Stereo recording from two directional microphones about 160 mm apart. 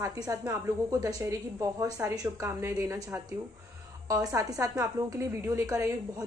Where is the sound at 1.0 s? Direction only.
20° right (ahead or behind).